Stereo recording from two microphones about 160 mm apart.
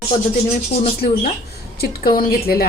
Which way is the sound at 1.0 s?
75° left (ahead or behind).